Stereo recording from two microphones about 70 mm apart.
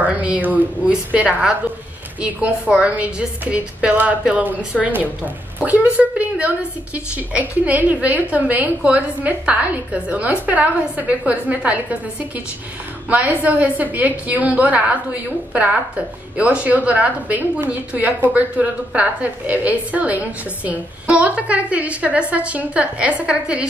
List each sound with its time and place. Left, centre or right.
0.0 s a sound: right
0.8 s a woman's voice: centre
13.1 s a woman's voice: right
16.3 s a woman's voice: centre